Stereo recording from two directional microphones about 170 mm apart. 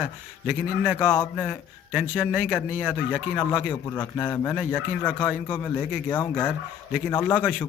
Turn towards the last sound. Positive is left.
turn(degrees=10)  # may be behind; listen again after turning